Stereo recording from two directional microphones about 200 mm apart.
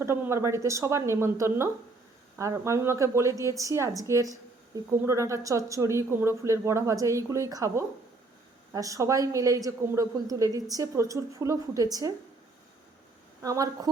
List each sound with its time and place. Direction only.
0.0 s a woman's voice: 15° right (ahead or behind)
13.4 s a woman's voice: 15° right (ahead or behind)